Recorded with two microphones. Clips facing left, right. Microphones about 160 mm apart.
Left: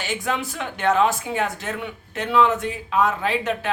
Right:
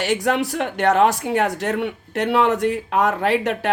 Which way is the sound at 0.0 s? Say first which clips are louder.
Right 6 dB; 70° right (ahead or behind).